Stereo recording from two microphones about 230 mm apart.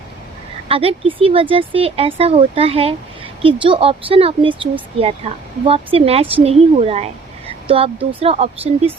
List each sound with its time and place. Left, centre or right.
0.7 s speech: right
8.2 s speech: right